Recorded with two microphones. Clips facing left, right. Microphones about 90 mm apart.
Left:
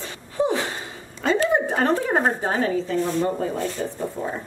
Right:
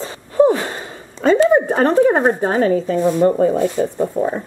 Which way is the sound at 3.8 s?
90° right.